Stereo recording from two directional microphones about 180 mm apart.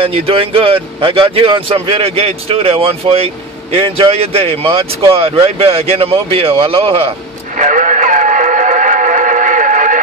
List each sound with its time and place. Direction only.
0.0 s speech: 30° right (ahead or behind)
7.5 s music: 45° right (ahead or behind)